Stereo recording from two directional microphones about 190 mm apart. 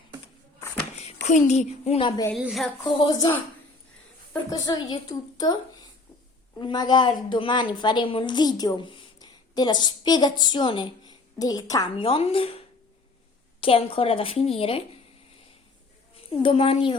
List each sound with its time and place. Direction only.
1.0 s a woman's voice: 40° left (ahead or behind); by 2.3 s 20° left (ahead or behind)
2.3 s a woman's voice: centre (ahead or behind)
2.8 s a woman's voice: 20° left (ahead or behind)
4.4 s a woman's voice: 20° left (ahead or behind)
5.4 s a sound: 20° left (ahead or behind)
6.6 s a woman's voice: 25° left (ahead or behind)
16.1 s a woman's voice: 30° left (ahead or behind)